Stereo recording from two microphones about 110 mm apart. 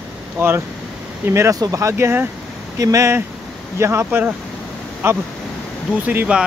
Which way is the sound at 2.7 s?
30° right (ahead or behind).